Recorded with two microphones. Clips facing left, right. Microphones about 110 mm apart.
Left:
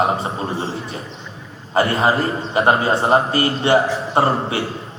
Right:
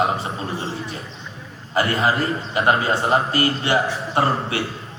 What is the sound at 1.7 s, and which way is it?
A man's voice, 30° left (ahead or behind).